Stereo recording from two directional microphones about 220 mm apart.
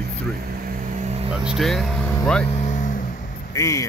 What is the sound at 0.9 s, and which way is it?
Vehicle, 30° right (ahead or behind).